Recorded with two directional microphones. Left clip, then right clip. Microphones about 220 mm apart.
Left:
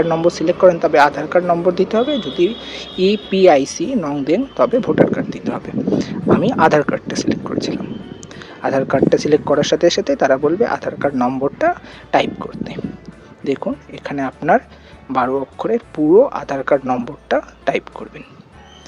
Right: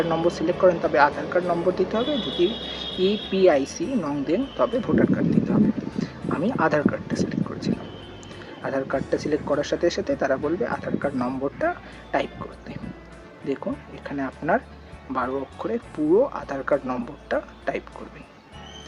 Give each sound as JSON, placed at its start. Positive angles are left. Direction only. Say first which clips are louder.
{"t": 0.0, "sound": "speech", "louder": "left 7 dB", "side_deg": 35}